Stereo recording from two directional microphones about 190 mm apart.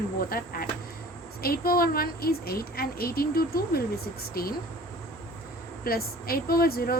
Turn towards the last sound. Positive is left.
turn(degrees=50)  # may be behind; listen again after turning